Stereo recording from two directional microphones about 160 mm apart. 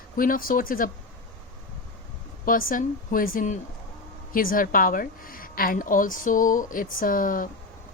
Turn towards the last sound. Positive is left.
turn(degrees=60)  # may be behind; listen again after turning